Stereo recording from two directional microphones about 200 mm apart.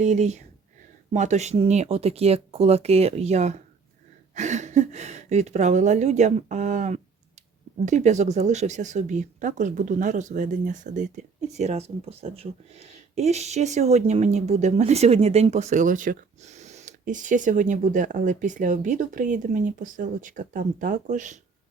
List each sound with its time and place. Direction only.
0.0 s speech: 35° right (ahead or behind)